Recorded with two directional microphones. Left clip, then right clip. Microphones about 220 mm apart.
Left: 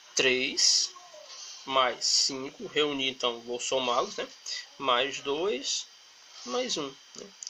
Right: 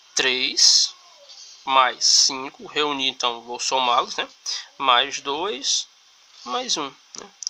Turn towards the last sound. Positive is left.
turn(degrees=-30)  # may be behind; listen again after turning